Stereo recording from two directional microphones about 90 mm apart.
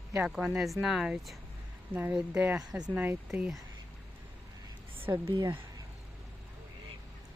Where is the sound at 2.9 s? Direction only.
20° right (ahead or behind).